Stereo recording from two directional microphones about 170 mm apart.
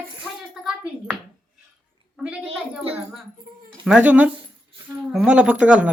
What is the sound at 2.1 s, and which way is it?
Speech, 5° right (ahead or behind).